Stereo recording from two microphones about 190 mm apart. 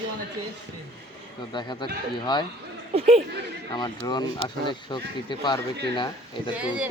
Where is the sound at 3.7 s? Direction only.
20° left (ahead or behind).